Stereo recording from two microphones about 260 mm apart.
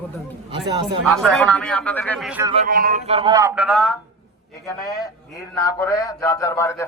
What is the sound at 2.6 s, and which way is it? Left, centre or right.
Speech, right.